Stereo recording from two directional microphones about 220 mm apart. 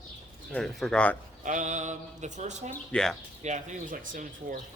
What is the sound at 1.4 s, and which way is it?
Speech, 35° right (ahead or behind).